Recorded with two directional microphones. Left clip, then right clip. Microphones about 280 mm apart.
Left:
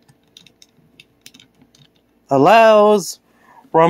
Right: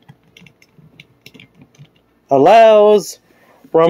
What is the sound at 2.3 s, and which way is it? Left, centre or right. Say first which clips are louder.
Speech: right 2 dB; left.